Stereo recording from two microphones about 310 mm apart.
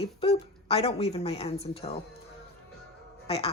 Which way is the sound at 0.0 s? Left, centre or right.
Centre.